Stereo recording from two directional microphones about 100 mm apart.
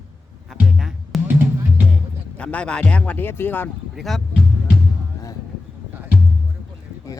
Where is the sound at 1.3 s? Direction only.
15° right (ahead or behind).